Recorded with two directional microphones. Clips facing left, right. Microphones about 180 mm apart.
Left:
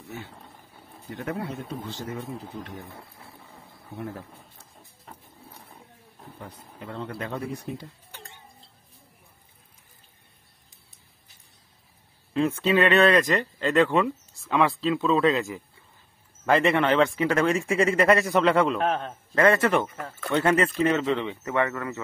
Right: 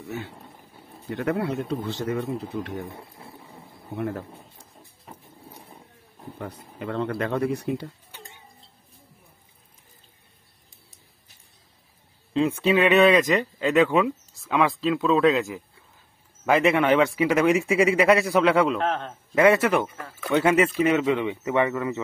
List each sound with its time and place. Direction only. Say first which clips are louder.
1.1 s speech: right 6 dB; 80° right
3.3 s a sound: right 4 dB; 20° right (ahead or behind)
3.9 s speech: right 6 dB; 80° right
4.6 s printer: right 2 dB; 10° right (ahead or behind)
6.4 s speech: right 7 dB; 75° right (ahead or behind)
12.4 s speech: right 1 dB; 10° right (ahead or behind)
18.9 s a man's voice: left 1 dB; 10° left (ahead or behind)
19.3 s speech: right 2 dB; 10° right (ahead or behind)